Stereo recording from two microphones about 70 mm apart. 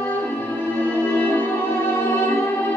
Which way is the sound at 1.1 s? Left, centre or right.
Left.